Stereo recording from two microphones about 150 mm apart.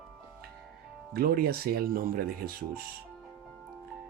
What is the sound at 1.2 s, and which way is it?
Speech, 90° right.